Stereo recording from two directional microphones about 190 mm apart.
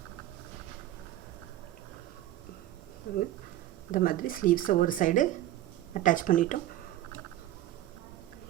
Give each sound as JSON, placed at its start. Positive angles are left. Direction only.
{"t": 3.9, "sound": "speech", "side_deg": 45}